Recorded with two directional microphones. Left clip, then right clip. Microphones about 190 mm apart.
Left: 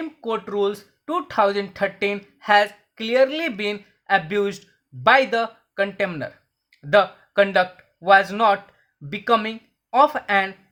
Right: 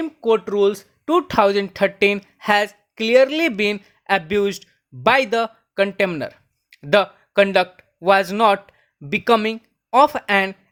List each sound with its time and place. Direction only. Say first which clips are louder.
0.0 s speech: right 8 dB; 30° right (ahead or behind)